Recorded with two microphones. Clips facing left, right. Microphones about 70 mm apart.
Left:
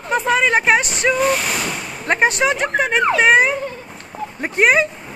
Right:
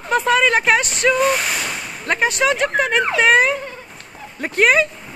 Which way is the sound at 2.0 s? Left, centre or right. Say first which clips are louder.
Left 3 dB; left.